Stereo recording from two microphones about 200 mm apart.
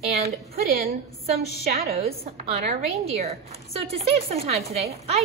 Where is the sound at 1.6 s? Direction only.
50° right (ahead or behind).